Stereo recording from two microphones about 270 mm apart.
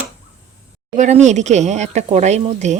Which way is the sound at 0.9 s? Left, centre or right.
Right.